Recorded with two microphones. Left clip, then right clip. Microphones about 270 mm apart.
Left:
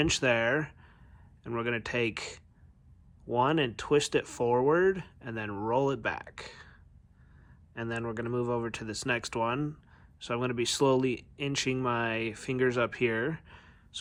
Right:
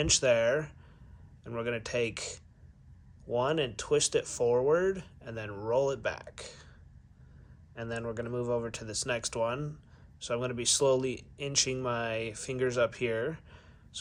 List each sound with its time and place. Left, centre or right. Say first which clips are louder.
0.0 s speech: right 1 dB; left
7.8 s speech: left 1 dB; left